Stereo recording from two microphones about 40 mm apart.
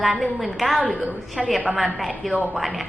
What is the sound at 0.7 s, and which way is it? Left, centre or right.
Speech, right.